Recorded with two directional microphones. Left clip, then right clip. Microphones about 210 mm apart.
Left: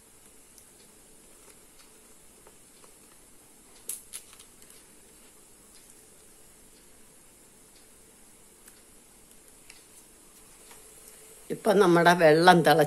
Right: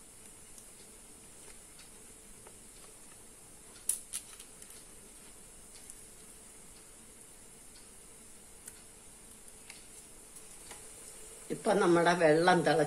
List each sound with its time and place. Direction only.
11.4 s speech: 40° left (ahead or behind)